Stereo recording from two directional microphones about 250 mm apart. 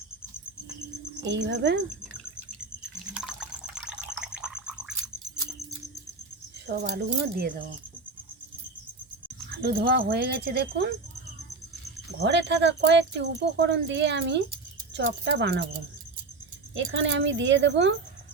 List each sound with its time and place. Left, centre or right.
1.2 s speech: right
3.1 s water: centre
6.9 s speech: right
9.6 s speech: right
12.2 s speech: right
16.7 s speech: right